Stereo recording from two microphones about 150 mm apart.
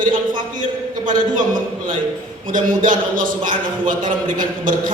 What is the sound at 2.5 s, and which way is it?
A man's voice, 60° right (ahead or behind).